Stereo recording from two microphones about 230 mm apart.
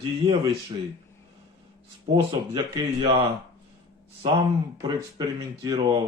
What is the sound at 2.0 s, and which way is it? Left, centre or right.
Speech, centre.